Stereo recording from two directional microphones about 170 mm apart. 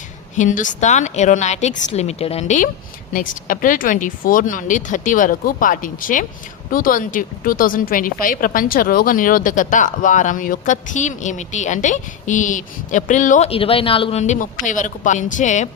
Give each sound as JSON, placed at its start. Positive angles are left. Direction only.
{"t": 0.3, "sound": "a woman's voice", "side_deg": 50}
{"t": 13.5, "sound": "a woman's voice", "side_deg": 35}